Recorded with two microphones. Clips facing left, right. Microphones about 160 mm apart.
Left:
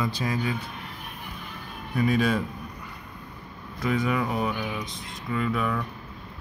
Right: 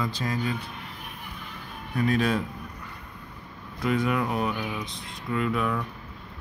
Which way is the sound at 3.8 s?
Centre (ahead or behind).